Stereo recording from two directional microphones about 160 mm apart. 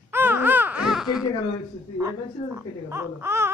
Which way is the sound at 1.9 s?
15° right (ahead or behind).